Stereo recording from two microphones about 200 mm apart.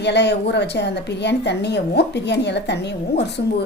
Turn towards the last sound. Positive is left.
turn(degrees=60)  # may be behind; listen again after turning